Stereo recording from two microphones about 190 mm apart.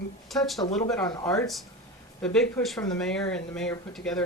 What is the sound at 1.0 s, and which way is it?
Speech, 20° left (ahead or behind).